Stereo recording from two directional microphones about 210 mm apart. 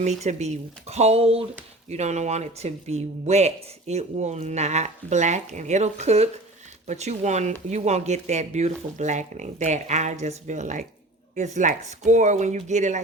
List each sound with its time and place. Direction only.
0.0 s speech: 35° right (ahead or behind)